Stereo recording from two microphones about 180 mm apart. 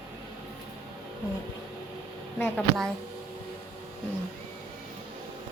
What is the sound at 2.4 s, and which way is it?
Speech, 5° left (ahead or behind).